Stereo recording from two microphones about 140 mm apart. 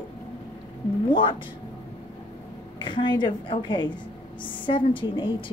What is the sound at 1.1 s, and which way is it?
Speech, 40° left (ahead or behind).